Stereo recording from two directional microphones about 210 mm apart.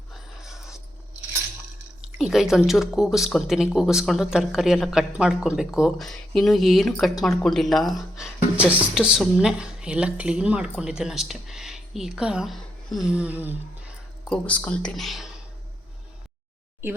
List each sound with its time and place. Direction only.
0.1 s dog: centre (ahead or behind)
2.1 s a woman's voice: centre (ahead or behind)
16.8 s speech: 10° right (ahead or behind)